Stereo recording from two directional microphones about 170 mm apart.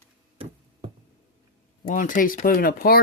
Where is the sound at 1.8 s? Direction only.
50° left (ahead or behind).